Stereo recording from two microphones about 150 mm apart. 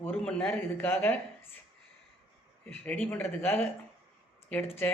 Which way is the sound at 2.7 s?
10° left (ahead or behind).